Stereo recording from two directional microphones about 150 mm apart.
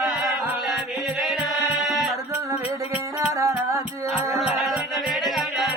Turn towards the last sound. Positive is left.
turn(degrees=0)  # may be behind; listen again after turning